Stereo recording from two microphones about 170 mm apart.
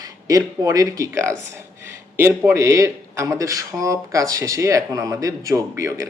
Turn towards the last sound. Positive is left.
turn(degrees=-20)  # may be behind; listen again after turning